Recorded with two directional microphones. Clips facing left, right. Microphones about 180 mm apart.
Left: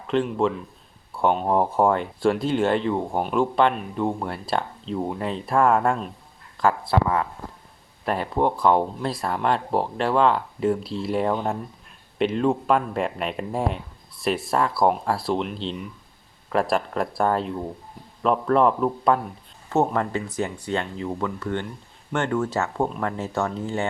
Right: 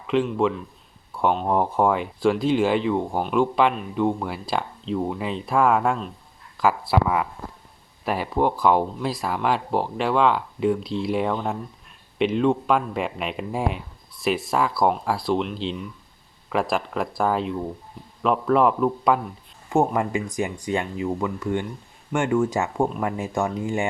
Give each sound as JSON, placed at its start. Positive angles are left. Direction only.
{"t": 0.1, "sound": "speech", "side_deg": 0}